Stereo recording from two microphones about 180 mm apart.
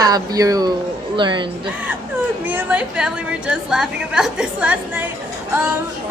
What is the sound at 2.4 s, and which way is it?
A woman's voice, 10° right (ahead or behind).